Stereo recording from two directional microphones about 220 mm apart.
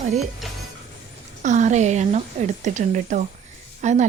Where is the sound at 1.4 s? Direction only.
35° right (ahead or behind).